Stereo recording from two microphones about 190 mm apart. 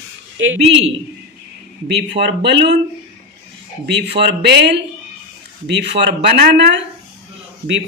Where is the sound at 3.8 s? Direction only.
60° right (ahead or behind).